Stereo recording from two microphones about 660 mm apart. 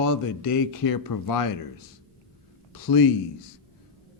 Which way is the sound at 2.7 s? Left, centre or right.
Left.